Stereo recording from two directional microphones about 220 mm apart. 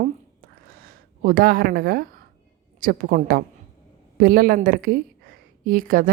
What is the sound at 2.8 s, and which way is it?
A woman's voice, 40° right (ahead or behind).